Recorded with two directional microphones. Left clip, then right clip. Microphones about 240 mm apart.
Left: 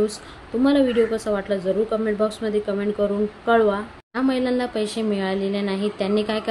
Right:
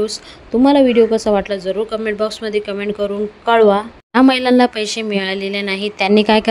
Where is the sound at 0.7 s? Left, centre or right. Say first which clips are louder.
Right 7 dB; right.